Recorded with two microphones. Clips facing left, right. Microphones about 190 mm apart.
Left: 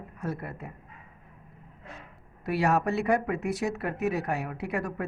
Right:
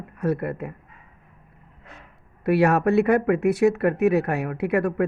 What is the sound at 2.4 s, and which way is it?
Speech, 60° right (ahead or behind).